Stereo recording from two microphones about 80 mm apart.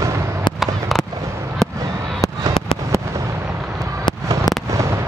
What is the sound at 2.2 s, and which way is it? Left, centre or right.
Fireworks, left.